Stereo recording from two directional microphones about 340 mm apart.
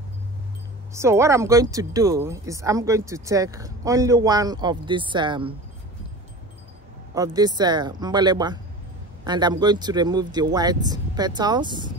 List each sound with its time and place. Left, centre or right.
0.9 s speech: centre
7.2 s speech: centre